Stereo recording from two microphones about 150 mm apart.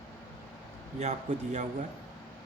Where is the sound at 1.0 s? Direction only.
50° right (ahead or behind).